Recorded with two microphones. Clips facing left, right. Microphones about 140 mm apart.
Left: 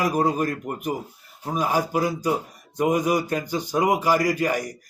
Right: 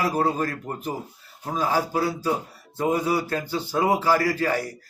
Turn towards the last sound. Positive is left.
turn(degrees=15)  # may be behind; listen again after turning